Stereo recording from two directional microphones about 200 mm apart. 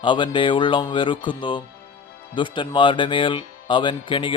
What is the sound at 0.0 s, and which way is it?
Speech, 25° left (ahead or behind).